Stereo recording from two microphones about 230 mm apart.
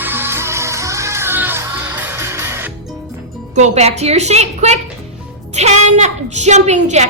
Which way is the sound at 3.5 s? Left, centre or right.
Right.